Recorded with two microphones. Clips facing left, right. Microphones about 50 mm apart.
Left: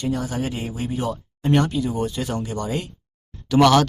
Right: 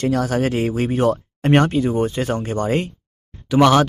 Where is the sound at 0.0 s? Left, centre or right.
Right.